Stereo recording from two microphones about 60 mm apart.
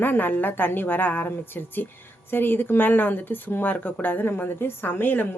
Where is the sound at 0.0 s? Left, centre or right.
Left.